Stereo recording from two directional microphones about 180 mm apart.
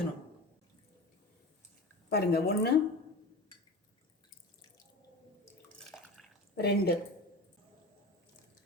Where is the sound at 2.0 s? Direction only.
60° left (ahead or behind).